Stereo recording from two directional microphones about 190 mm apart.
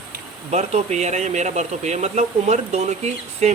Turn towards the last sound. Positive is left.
turn(degrees=-35)  # may be behind; listen again after turning